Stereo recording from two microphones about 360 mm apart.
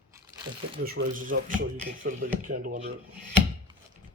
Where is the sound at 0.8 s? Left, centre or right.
Right.